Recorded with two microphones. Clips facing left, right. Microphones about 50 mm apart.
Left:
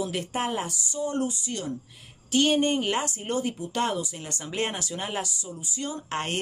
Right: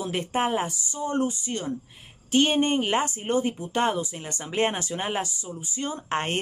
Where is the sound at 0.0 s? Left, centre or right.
Right.